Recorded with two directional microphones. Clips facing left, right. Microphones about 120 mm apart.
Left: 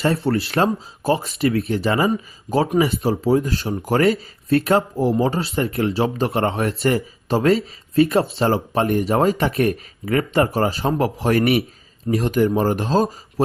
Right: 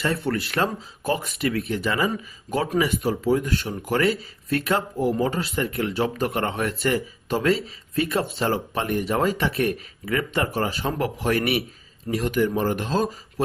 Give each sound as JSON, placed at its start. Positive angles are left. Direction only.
{"t": 0.0, "sound": "speech", "side_deg": 35}